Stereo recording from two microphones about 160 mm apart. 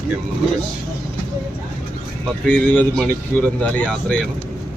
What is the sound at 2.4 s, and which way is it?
Speech, 10° left (ahead or behind).